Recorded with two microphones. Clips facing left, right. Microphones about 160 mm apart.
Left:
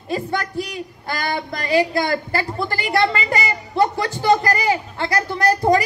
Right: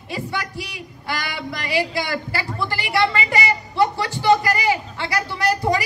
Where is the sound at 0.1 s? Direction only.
45° left (ahead or behind).